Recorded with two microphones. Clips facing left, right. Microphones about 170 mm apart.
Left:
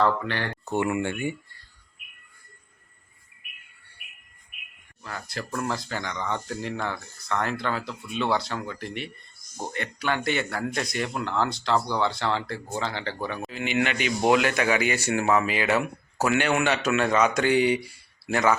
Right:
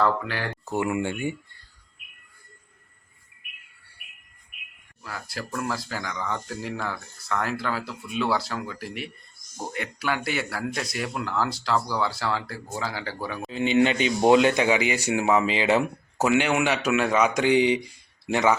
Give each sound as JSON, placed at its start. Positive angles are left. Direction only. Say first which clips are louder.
{"t": 0.0, "sound": "speech", "louder": "even", "side_deg": -5}
{"t": 5.0, "sound": "speech", "louder": "even", "side_deg": -5}
{"t": 13.5, "sound": "speech", "louder": "right 7 dB", "side_deg": -30}